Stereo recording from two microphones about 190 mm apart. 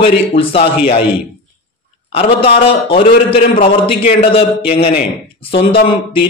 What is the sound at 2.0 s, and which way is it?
A man's voice, 30° left (ahead or behind).